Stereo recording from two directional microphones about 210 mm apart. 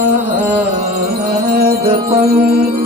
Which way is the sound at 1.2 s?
50° right (ahead or behind).